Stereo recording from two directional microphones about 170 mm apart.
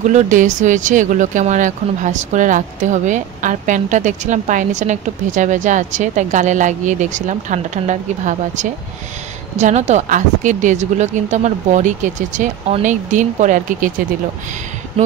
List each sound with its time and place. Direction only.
0.0 s speech: 45° right (ahead or behind)